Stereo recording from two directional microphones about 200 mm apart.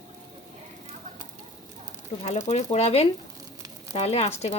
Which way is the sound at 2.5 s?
35° left (ahead or behind).